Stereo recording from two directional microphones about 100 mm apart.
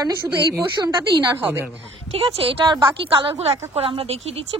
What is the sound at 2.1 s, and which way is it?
Speech, 70° right (ahead or behind).